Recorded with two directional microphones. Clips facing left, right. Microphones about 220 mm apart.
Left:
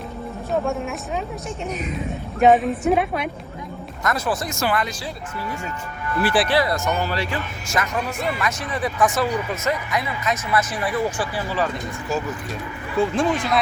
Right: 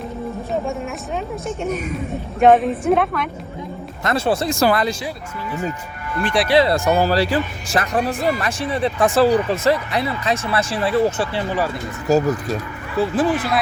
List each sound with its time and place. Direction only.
2.4 s speech: centre (ahead or behind)
4.0 s speech: 25° right (ahead or behind)
6.1 s speech: centre (ahead or behind)
6.5 s speech: 25° right (ahead or behind)
12.0 s speech: 40° right (ahead or behind)
13.0 s speech: 5° right (ahead or behind)